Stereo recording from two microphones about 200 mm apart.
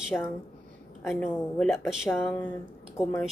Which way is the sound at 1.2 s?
5° left (ahead or behind).